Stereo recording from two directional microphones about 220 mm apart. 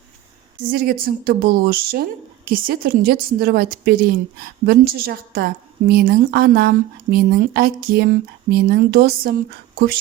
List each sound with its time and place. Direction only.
0.7 s speech: 40° right (ahead or behind)